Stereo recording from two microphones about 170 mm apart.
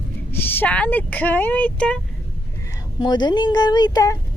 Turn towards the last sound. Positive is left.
turn(degrees=20)  # may be behind; listen again after turning